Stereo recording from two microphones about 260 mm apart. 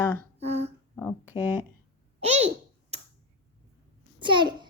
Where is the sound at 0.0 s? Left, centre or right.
Centre.